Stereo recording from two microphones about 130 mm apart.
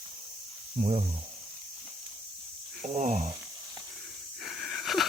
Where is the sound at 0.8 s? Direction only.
55° right (ahead or behind).